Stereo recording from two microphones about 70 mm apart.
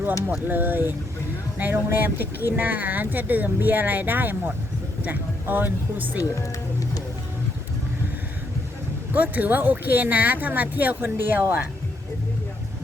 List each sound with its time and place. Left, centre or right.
0.3 s speech: right
6.4 s music: left
9.1 s speech: right